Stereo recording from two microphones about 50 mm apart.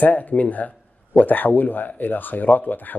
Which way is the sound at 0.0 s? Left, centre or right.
Left.